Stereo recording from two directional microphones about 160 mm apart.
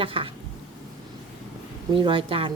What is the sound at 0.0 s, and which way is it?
Speech, 35° right (ahead or behind).